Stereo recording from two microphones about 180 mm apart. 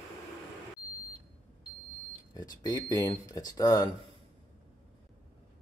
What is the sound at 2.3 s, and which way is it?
Speech, 20° left (ahead or behind).